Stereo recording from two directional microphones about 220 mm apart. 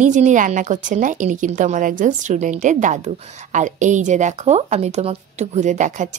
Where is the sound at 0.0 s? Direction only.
35° right (ahead or behind).